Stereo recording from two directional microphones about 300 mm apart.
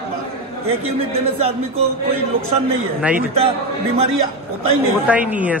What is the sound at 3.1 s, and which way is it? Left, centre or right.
Speech, centre.